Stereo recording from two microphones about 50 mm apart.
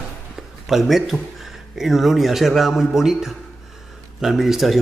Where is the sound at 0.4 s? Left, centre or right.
Centre.